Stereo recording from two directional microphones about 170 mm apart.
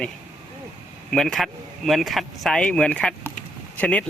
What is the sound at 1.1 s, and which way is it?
Speech, centre (ahead or behind).